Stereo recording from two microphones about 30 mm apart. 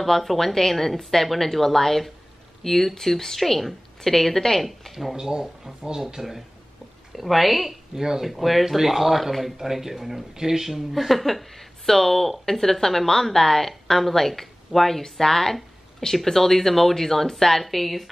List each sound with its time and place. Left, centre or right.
0.0 s speech: centre
5.1 s speech: right
7.2 s speech: centre
7.9 s speech: centre
8.3 s speech: centre
10.7 s speech: centre